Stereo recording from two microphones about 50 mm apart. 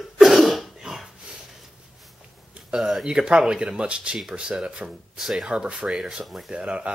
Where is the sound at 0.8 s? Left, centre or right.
Centre.